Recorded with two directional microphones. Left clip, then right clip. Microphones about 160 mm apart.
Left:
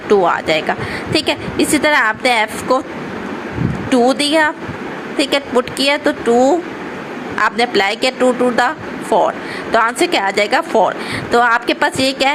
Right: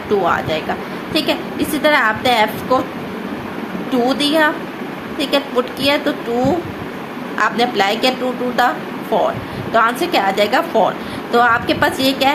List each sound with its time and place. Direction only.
0.1 s a woman's voice: 50° left (ahead or behind)
3.9 s a woman's voice: 45° left (ahead or behind)
9.1 s a woman's voice: 40° left (ahead or behind)